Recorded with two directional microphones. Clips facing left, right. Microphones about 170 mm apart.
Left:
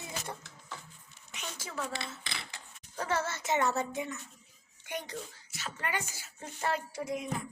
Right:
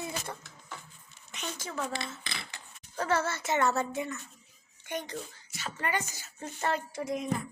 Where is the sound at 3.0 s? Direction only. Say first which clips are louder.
Right 3 dB; 15° left (ahead or behind).